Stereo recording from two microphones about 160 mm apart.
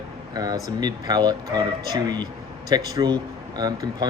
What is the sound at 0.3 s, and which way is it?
Speech, 25° right (ahead or behind).